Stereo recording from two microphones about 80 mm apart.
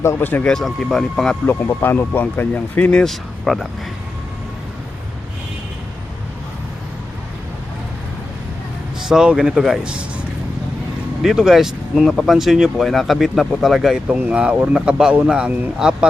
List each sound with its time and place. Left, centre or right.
0.2 s speech: left
0.4 s speech: centre
1.5 s speech: left
3.0 s speech: centre
9.0 s speech: centre
11.2 s speech: centre
14.1 s speech: centre